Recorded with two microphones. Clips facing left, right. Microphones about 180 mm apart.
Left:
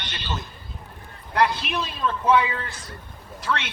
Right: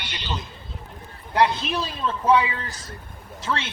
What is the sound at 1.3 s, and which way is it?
A man's voice, 30° right (ahead or behind).